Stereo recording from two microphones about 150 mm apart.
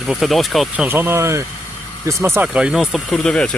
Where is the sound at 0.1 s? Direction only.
Centre (ahead or behind).